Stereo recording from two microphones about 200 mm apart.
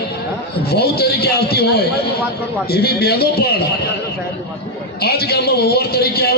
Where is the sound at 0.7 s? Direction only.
50° left (ahead or behind).